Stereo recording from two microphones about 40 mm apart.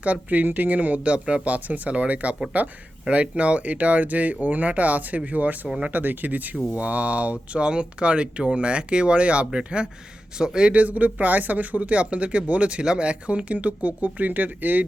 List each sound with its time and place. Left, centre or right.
0.0 s speech: right
5.9 s speech: right; by 10.7 s centre
10.7 s speech: right